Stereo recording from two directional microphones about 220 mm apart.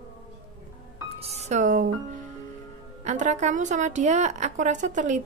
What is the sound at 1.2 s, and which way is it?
Speech, 30° right (ahead or behind).